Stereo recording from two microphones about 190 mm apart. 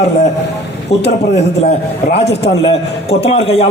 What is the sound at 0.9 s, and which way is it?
Speech, 35° left (ahead or behind).